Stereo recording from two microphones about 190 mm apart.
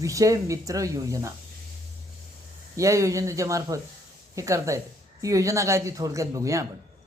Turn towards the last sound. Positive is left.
turn(degrees=-15)  # may be behind; listen again after turning